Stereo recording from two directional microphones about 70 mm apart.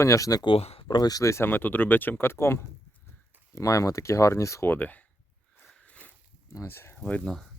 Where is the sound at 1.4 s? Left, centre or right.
Left.